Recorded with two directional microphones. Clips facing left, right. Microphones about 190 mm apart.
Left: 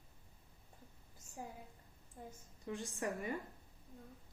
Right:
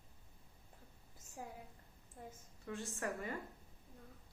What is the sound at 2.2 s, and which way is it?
Speech, centre (ahead or behind).